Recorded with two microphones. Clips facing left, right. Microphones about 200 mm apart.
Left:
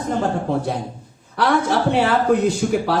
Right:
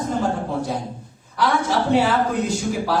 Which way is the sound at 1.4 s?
60° left (ahead or behind).